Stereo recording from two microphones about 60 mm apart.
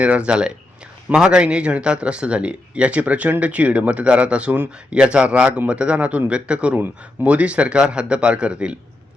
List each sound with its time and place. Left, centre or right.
0.0 s a man's voice: centre
6.7 s a man's voice: right